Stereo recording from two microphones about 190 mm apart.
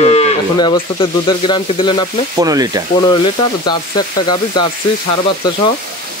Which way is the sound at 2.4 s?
20° right (ahead or behind).